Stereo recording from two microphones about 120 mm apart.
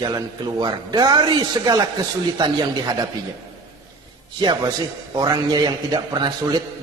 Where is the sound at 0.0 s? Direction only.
35° right (ahead or behind).